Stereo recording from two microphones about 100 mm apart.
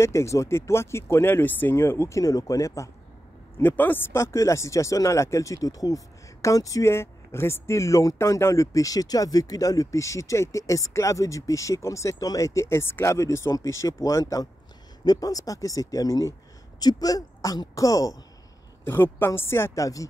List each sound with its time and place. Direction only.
0.0 s speech: 30° left (ahead or behind)
3.5 s speech: 20° left (ahead or behind); by 18.1 s 35° left (ahead or behind)
18.9 s speech: 20° left (ahead or behind)